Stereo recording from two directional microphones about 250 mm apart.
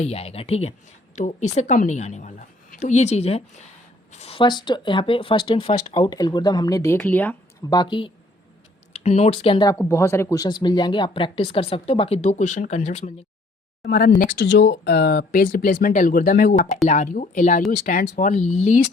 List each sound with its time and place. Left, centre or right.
0.0 s speech: left
13.8 s speech: left